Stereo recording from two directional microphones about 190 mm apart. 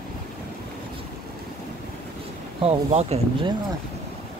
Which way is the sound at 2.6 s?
30° right (ahead or behind).